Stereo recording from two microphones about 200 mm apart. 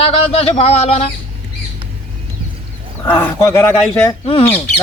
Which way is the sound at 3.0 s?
10° left (ahead or behind).